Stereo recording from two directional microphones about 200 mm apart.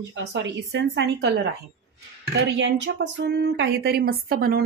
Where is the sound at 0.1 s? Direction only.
65° right (ahead or behind).